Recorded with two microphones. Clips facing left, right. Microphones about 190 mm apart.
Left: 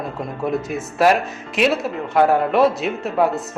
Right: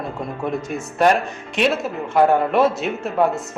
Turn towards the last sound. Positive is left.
turn(degrees=0)  # may be behind; listen again after turning